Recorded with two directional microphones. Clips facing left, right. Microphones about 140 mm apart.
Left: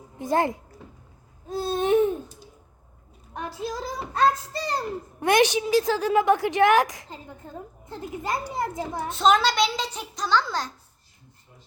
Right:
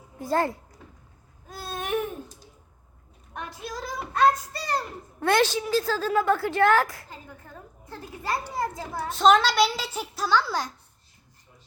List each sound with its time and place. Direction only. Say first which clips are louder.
0.2 s a child's voice: left 2 dB; 20° left (ahead or behind)
1.5 s a sound: left 9 dB; 25° left (ahead or behind)
3.6 s a child's voice: left 3 dB; 25° left (ahead or behind)
9.0 s a child's voice: right 1 dB; centre (ahead or behind)